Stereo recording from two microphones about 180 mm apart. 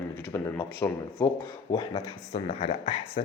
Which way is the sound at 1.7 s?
25° left (ahead or behind).